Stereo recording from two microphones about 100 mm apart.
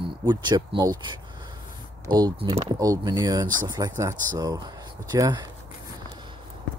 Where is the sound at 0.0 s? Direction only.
50° right (ahead or behind).